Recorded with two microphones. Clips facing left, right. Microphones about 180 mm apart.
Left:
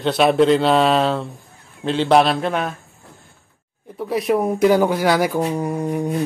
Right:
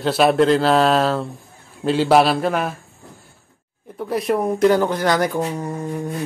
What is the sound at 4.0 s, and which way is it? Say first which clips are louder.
Speech: left 1 dB; centre (ahead or behind).